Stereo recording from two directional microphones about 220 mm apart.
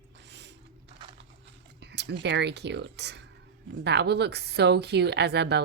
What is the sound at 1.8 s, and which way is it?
A woman's voice, 50° right (ahead or behind).